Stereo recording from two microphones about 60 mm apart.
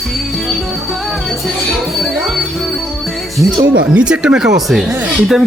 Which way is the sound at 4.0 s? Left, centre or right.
Centre.